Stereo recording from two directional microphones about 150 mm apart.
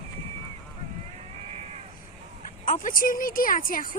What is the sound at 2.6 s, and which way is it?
A woman's voice, 60° left (ahead or behind).